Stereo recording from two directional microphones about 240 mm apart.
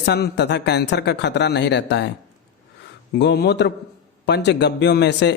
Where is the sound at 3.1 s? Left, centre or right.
Left.